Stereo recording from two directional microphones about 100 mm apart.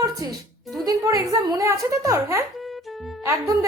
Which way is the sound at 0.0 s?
40° right (ahead or behind).